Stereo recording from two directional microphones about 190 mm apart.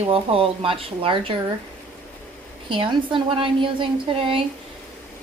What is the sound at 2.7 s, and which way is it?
A woman's voice, 25° right (ahead or behind).